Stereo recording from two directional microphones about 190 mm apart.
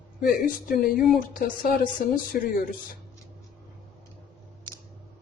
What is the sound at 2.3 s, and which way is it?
Speech, 45° left (ahead or behind).